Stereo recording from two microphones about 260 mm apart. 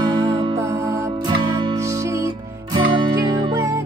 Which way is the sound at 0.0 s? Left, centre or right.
Centre.